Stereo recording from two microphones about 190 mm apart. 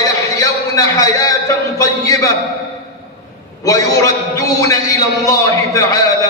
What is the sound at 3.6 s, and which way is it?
A man's voice, 15° left (ahead or behind).